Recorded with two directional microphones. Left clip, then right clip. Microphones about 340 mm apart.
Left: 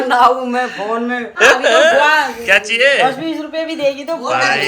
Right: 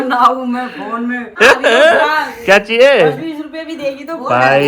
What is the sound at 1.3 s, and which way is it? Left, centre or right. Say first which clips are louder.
Speech: right 2 dB; centre.